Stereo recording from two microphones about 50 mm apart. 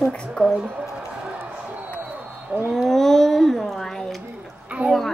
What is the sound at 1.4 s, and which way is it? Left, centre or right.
Basketball bounce, right.